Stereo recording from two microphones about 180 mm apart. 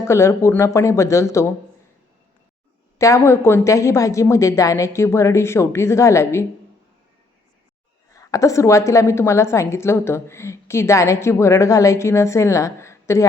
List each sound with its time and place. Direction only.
0.0 s a woman's voice: 15° left (ahead or behind)
3.0 s a woman's voice: 15° left (ahead or behind)
8.1 s a woman's voice: 20° left (ahead or behind)